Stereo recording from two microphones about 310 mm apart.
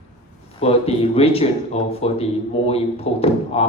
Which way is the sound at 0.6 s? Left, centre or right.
Centre.